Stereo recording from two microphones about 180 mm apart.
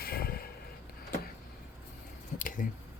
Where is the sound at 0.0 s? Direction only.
55° left (ahead or behind).